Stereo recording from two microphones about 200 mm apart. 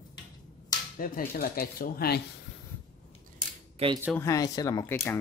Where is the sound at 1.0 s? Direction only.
45° left (ahead or behind).